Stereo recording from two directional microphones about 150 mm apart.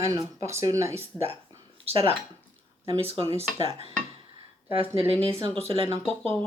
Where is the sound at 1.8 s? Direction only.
40° right (ahead or behind).